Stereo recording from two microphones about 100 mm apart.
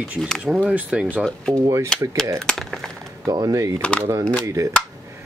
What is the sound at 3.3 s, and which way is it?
Speech, 35° right (ahead or behind).